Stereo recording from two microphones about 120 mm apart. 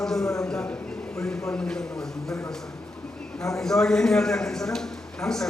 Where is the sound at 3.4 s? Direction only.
5° left (ahead or behind).